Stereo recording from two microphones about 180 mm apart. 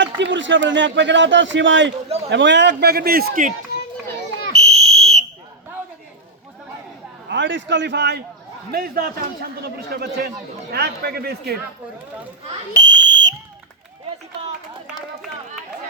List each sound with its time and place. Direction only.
0.0 s a man's voice: 90° right; by 3.5 s 55° right (ahead or behind)
4.5 s a sound: 35° right (ahead or behind)
7.3 s a man's voice: 90° right; by 8.2 s 75° right (ahead or behind)
8.7 s a man's voice: 55° right (ahead or behind)
12.8 s fire alarm: 85° right